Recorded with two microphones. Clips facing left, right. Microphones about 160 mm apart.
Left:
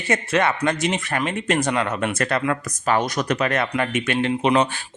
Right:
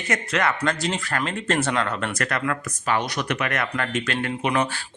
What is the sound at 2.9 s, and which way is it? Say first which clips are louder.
Speech: left 4 dB; 45° left (ahead or behind).